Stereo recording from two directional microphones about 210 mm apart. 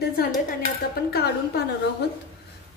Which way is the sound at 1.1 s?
50° left (ahead or behind).